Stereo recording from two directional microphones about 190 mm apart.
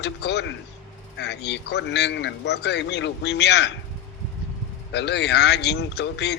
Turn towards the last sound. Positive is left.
turn(degrees=65)  # may be behind; listen again after turning